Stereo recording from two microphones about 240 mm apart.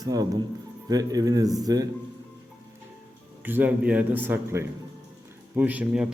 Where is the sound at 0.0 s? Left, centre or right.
Centre.